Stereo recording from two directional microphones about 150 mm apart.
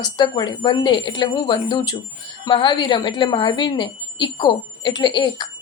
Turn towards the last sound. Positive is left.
turn(degrees=30)  # may be behind; listen again after turning